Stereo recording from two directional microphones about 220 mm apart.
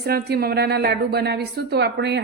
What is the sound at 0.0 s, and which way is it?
A woman's voice, 45° right (ahead or behind).